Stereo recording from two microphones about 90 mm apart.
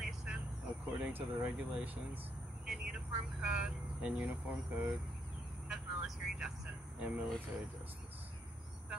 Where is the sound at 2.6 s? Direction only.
10° right (ahead or behind).